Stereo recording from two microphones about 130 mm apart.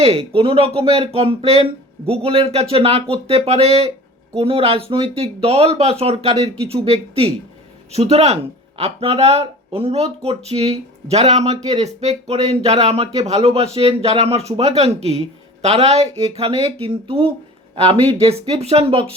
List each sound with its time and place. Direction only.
0.0 s speech: 45° right (ahead or behind)